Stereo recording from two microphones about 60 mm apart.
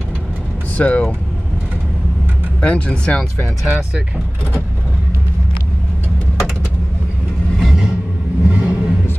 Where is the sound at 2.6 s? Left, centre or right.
Left.